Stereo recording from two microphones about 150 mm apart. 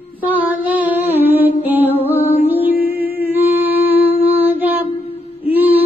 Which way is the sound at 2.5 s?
15° right (ahead or behind).